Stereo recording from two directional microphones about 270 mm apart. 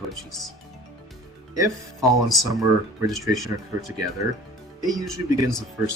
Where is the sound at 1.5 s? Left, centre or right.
Centre.